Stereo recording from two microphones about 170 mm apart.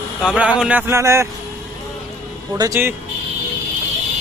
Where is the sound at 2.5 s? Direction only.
20° right (ahead or behind).